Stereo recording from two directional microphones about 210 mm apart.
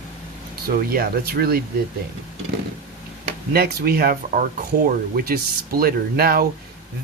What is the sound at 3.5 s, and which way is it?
Speech, 45° right (ahead or behind).